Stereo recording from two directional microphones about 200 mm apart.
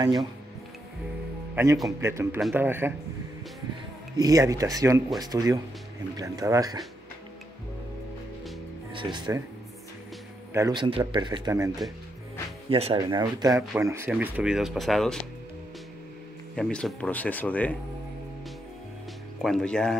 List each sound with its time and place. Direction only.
0.0 s a man's voice: 20° right (ahead or behind)
1.5 s speech: 15° right (ahead or behind)
4.2 s speech: 15° right (ahead or behind)
8.9 s a man's voice: 20° right (ahead or behind)
10.5 s a man's voice: 20° right (ahead or behind)
12.6 s a man's voice: 30° right (ahead or behind); by 15.1 s centre (ahead or behind)
16.5 s speech: 5° left (ahead or behind)
19.4 s speech: 5° left (ahead or behind)